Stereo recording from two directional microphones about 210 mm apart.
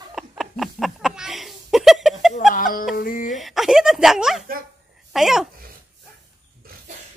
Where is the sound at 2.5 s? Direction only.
40° left (ahead or behind).